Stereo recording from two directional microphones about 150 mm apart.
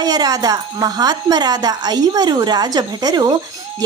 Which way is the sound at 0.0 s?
25° right (ahead or behind).